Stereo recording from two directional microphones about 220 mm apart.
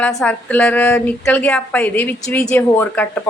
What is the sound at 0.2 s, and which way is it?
A woman's voice, 5° left (ahead or behind).